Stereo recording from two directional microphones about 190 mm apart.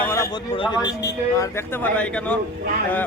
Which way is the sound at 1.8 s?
5° left (ahead or behind).